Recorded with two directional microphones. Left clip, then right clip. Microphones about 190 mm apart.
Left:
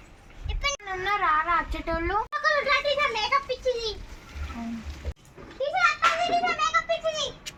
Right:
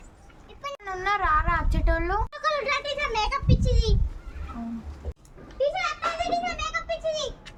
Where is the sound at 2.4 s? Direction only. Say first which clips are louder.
Left 4 dB; 30° right (ahead or behind).